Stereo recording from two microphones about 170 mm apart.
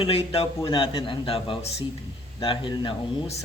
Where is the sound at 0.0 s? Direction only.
35° left (ahead or behind).